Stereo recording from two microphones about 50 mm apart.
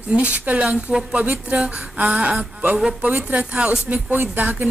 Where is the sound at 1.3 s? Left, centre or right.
Right.